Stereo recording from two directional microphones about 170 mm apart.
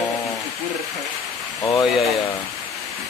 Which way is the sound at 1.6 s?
20° left (ahead or behind).